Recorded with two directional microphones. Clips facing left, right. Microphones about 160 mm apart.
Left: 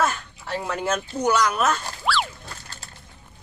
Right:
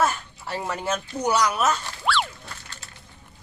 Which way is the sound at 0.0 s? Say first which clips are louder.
Even; 5° right (ahead or behind).